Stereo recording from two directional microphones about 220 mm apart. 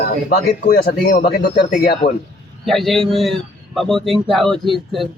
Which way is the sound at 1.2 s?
45° left (ahead or behind).